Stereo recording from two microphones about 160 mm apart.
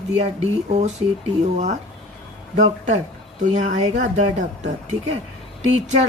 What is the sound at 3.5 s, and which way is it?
Speech, 50° right (ahead or behind).